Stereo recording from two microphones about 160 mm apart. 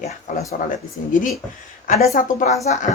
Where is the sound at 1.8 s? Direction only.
60° left (ahead or behind).